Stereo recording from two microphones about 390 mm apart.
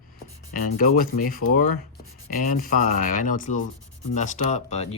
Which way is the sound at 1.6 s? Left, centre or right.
Left.